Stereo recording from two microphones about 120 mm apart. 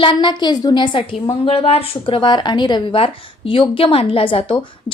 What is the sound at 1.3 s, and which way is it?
A woman's voice, 55° left (ahead or behind).